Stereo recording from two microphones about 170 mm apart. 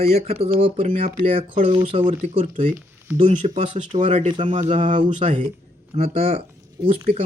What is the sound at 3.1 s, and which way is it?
Speech, 45° right (ahead or behind).